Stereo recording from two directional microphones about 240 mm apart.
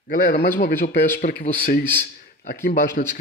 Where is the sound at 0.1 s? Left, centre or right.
Left.